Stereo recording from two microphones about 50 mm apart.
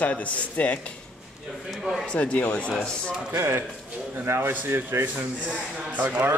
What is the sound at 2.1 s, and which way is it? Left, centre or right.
Speech, left.